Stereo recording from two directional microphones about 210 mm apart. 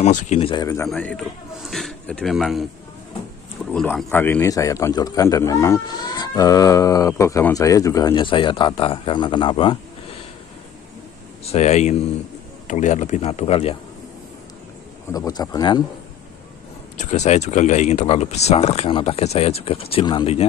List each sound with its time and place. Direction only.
0.0 s speech: 30° left (ahead or behind)
0.8 s a man's voice: 5° left (ahead or behind)
3.7 s a man's voice: 10° left (ahead or behind)
11.4 s speech: 30° left (ahead or behind)
15.1 s a man's voice: 15° left (ahead or behind)
16.9 s speech: 35° left (ahead or behind)